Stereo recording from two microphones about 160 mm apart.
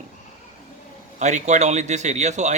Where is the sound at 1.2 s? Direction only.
50° right (ahead or behind).